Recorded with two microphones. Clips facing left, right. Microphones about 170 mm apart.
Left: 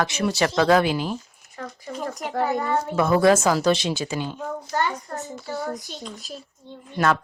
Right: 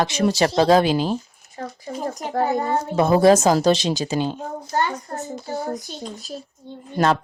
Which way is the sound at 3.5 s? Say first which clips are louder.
Right 3 dB; 40° right (ahead or behind).